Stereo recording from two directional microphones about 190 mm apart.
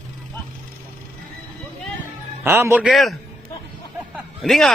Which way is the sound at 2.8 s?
Centre (ahead or behind).